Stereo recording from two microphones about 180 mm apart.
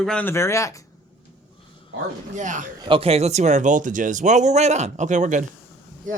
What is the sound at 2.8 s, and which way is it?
A man's voice, 30° right (ahead or behind).